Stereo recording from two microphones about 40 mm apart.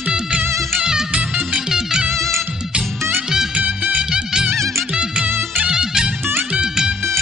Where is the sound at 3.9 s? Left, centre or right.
Centre.